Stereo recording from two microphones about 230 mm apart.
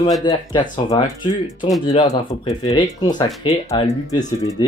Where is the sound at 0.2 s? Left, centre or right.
Centre.